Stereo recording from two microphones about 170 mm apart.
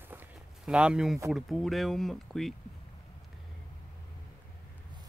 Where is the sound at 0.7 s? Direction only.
5° right (ahead or behind).